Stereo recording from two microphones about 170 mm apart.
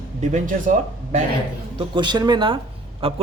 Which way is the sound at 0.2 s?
45° right (ahead or behind).